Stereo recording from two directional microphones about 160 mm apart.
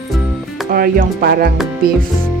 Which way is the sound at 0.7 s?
70° right (ahead or behind).